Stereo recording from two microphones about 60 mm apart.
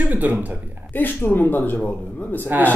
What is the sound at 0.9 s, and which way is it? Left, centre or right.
Speech, left.